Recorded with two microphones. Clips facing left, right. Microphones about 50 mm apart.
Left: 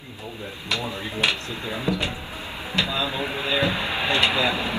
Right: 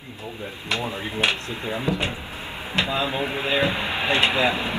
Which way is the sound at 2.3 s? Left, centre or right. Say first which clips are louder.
Even; centre.